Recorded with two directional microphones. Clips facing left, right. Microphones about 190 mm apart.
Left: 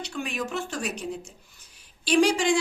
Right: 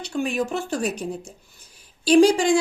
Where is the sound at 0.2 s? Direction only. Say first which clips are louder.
Right 7 dB; 35° right (ahead or behind).